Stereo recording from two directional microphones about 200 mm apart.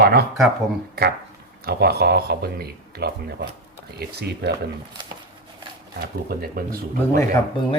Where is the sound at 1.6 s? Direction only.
50° right (ahead or behind).